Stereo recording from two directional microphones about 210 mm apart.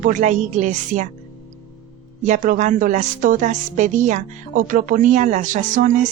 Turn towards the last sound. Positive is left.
turn(degrees=-35)  # may be behind; listen again after turning